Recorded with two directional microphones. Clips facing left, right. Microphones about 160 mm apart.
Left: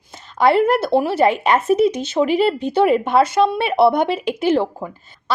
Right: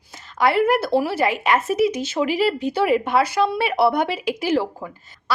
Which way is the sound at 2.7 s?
25° left (ahead or behind).